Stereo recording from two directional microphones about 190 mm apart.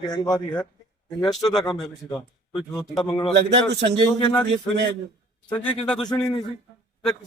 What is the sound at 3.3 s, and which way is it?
Speech, 65° right (ahead or behind).